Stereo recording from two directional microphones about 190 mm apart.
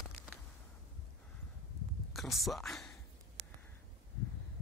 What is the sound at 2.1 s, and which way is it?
Speech, centre (ahead or behind).